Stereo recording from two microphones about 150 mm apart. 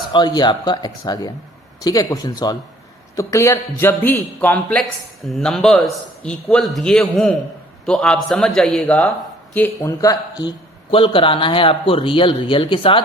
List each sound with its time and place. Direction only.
0.1 s a man's voice: 30° left (ahead or behind)
10.9 s speech: 35° left (ahead or behind)